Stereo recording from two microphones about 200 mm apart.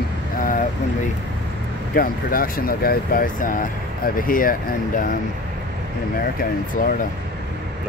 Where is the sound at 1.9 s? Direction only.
45° left (ahead or behind).